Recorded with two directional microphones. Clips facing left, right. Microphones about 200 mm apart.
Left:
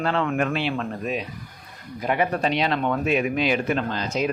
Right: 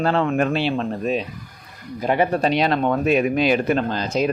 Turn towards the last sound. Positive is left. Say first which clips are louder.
# right 4 dB
turn(degrees=-35)  # may be behind; listen again after turning